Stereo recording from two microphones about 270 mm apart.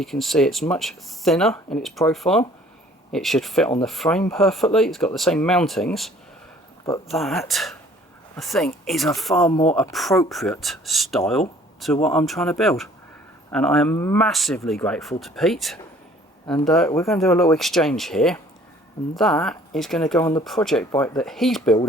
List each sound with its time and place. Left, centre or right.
0.0 s speech: centre
9.5 s speech: centre
9.7 s speech: centre